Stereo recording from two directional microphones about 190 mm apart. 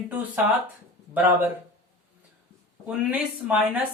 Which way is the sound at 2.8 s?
5° right (ahead or behind).